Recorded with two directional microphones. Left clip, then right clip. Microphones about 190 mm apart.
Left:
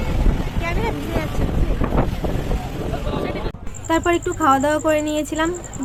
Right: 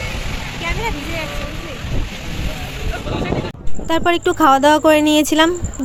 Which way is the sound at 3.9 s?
55° right (ahead or behind).